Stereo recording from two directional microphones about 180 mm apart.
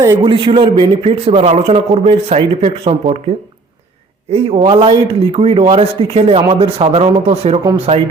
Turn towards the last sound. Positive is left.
turn(degrees=-35)  # may be behind; listen again after turning